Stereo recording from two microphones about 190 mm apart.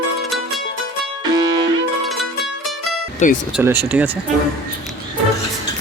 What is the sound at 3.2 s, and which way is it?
Speech, 40° left (ahead or behind).